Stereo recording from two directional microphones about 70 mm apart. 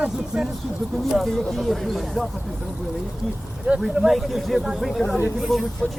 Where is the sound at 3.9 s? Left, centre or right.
Centre.